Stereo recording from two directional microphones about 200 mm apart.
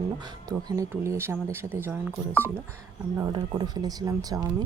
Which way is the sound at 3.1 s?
20° right (ahead or behind).